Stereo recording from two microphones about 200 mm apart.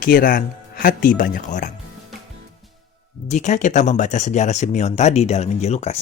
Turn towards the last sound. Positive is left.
turn(degrees=30)  # may be behind; listen again after turning